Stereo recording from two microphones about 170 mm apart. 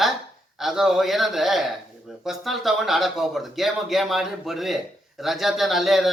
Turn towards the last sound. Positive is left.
turn(degrees=0)  # may be behind; listen again after turning